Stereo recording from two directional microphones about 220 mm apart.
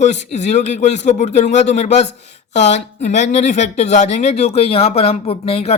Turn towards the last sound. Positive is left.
turn(degrees=25)  # may be behind; listen again after turning